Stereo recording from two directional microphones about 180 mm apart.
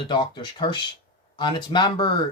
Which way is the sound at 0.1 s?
25° left (ahead or behind).